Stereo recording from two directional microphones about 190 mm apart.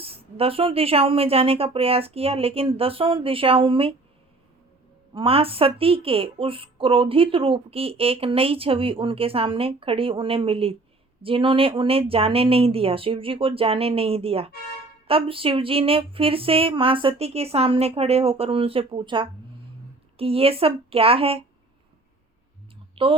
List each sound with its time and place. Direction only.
0.0 s a woman's voice: 30° right (ahead or behind)
5.1 s a woman's voice: 30° right (ahead or behind)
23.0 s a woman's voice: 30° right (ahead or behind)